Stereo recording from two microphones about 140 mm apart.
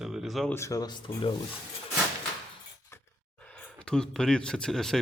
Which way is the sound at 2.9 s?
20° left (ahead or behind).